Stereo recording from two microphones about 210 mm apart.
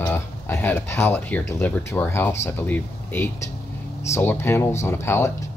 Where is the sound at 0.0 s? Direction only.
10° left (ahead or behind).